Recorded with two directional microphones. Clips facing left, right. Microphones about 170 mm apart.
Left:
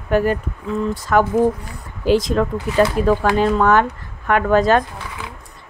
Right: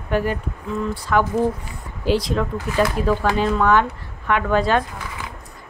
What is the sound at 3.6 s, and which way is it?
Speech, 45° left (ahead or behind).